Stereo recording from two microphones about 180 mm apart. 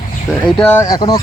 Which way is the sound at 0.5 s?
10° left (ahead or behind).